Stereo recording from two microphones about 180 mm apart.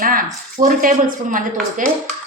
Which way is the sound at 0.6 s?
50° right (ahead or behind).